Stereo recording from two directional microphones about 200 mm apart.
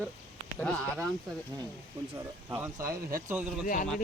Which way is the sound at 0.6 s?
5° left (ahead or behind).